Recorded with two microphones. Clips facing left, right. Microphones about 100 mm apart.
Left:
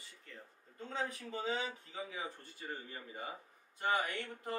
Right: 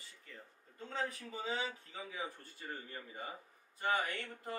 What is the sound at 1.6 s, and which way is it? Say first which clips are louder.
Mantra: even; 10° left (ahead or behind).